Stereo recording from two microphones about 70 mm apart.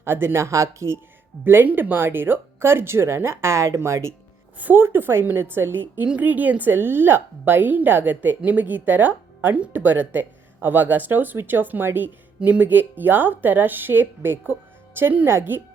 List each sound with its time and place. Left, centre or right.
0.0 s speech: right
1.5 s speech: right
4.6 s speech: right